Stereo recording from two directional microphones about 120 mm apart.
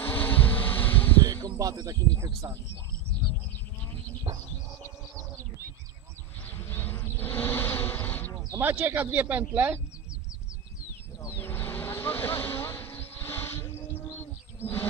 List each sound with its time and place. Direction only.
0.0 s bee: 15° left (ahead or behind)
1.2 s a sound: 30° right (ahead or behind)
6.4 s bee: 15° left (ahead or behind)
8.5 s speech: 20° right (ahead or behind)
11.2 s vehicle: 20° left (ahead or behind)
14.6 s bird: 20° left (ahead or behind)